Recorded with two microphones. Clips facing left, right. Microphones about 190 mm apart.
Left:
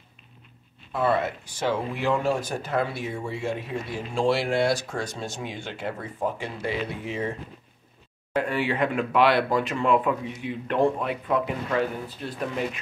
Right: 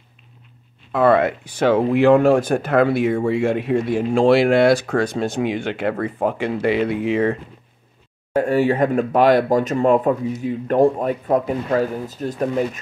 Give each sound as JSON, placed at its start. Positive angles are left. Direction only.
{"t": 0.9, "sound": "speech", "side_deg": -70}
{"t": 4.1, "sound": "speech", "side_deg": -80}
{"t": 8.4, "sound": "speech", "side_deg": -45}